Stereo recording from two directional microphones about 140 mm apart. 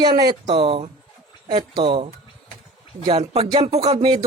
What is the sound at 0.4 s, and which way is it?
Speech, 40° right (ahead or behind).